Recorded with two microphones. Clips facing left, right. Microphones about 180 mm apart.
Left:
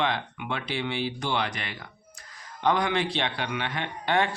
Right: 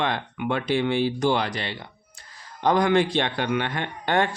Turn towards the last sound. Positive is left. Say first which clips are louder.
# right 2 dB
turn(degrees=-45)  # may be behind; listen again after turning